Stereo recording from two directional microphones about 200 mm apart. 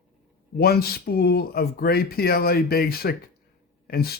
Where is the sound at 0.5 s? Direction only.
50° left (ahead or behind).